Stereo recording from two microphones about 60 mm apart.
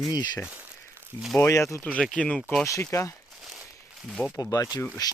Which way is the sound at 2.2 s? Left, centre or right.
Centre.